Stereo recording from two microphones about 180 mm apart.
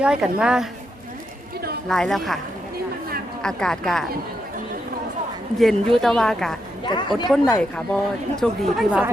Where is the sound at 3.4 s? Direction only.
5° left (ahead or behind).